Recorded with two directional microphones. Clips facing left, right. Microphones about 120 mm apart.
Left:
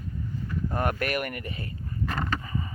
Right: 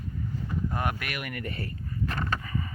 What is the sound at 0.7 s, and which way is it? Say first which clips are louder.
Speech: left 4 dB; 45° left (ahead or behind).